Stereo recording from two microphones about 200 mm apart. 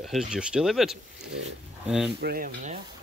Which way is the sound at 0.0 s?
Centre (ahead or behind).